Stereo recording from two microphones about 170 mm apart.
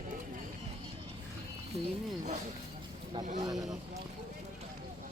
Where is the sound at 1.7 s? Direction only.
40° right (ahead or behind).